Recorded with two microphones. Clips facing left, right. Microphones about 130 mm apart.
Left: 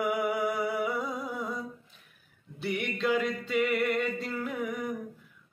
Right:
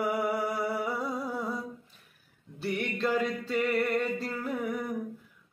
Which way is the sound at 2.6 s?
Centre (ahead or behind).